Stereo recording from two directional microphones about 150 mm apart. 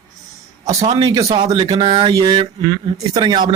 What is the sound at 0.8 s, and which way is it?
Speech, 30° right (ahead or behind).